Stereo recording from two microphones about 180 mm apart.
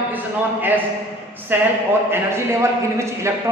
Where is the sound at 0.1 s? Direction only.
10° right (ahead or behind).